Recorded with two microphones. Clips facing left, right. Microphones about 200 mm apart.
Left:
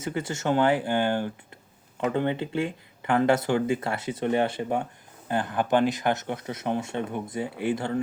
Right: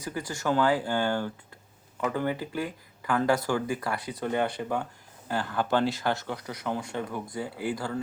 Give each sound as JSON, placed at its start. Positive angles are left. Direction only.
{"t": 0.0, "sound": "speech", "side_deg": 25}